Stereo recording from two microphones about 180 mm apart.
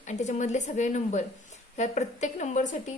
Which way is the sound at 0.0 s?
40° left (ahead or behind).